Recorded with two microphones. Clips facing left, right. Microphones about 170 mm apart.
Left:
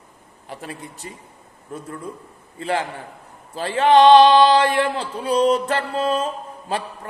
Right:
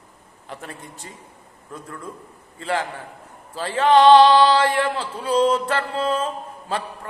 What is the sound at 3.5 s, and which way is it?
Male singing, 15° left (ahead or behind).